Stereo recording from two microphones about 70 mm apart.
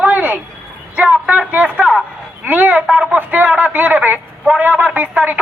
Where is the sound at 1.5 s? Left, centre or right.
Right.